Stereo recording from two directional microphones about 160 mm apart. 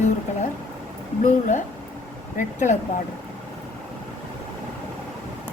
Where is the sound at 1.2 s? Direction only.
50° left (ahead or behind).